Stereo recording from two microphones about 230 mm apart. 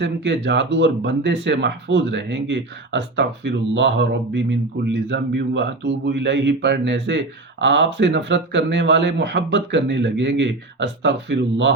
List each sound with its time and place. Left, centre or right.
0.0 s speech: right